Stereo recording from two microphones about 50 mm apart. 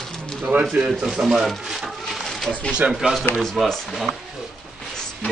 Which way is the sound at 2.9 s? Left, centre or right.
Centre.